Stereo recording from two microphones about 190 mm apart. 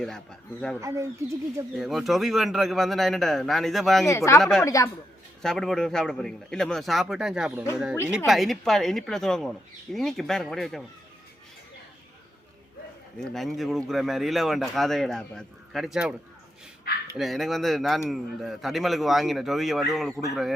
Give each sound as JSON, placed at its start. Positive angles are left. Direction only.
{"t": 0.8, "sound": "speech", "side_deg": -15}
{"t": 1.7, "sound": "speech", "side_deg": 0}
{"t": 4.6, "sound": "a man's voice", "side_deg": 15}
{"t": 5.4, "sound": "speech", "side_deg": 0}
{"t": 13.1, "sound": "speech", "side_deg": 0}
{"t": 17.2, "sound": "speech", "side_deg": 0}